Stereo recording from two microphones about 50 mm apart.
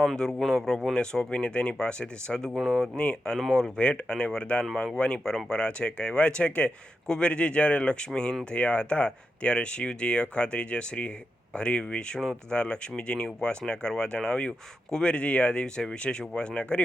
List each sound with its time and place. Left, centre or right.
0.0 s a man's voice: centre
1.3 s speech: left
2.5 s speech: centre
3.0 s speech: left
3.3 s a man's voice: centre
3.8 s speech: left